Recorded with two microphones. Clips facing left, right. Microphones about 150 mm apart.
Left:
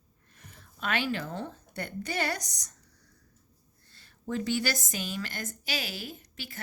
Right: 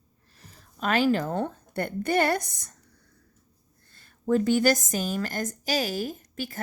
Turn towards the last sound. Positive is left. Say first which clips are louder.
# right 9 dB
turn(degrees=-45)  # may be behind; listen again after turning